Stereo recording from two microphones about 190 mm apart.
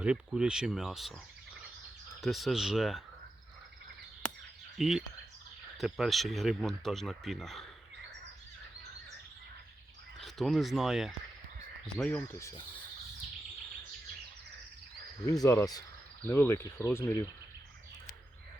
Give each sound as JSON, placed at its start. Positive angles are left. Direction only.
{"t": 0.0, "sound": "speech", "side_deg": -5}
{"t": 2.2, "sound": "speech", "side_deg": 0}
{"t": 4.8, "sound": "speech", "side_deg": 0}
{"t": 10.2, "sound": "speech", "side_deg": 0}
{"t": 15.3, "sound": "speech", "side_deg": 15}